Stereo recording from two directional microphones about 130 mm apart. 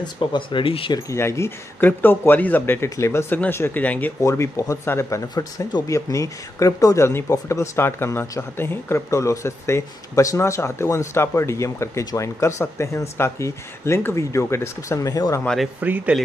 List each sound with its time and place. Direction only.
0.0 s speech: 35° left (ahead or behind)
0.9 s speech: 25° left (ahead or behind)
4.2 s speech: 25° left (ahead or behind)
15.4 s speech: centre (ahead or behind)
15.8 s speech: 10° right (ahead or behind)